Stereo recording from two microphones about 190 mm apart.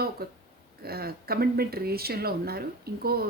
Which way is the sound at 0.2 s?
55° right (ahead or behind).